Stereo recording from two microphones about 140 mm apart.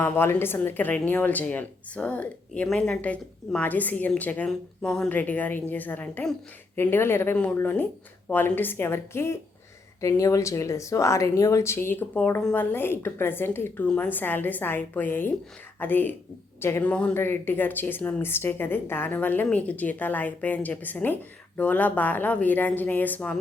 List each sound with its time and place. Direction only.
0.0 s speech: 15° left (ahead or behind)